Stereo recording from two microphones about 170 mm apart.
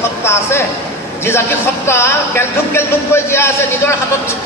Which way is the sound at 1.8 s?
15° left (ahead or behind).